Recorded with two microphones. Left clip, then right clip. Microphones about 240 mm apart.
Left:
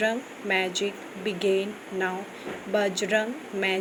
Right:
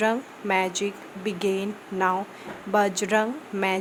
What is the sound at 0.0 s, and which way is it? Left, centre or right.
Speech, right.